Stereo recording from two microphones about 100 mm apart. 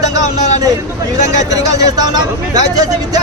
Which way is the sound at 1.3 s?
35° right (ahead or behind).